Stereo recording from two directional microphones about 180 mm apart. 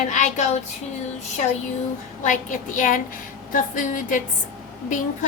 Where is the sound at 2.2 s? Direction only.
45° left (ahead or behind).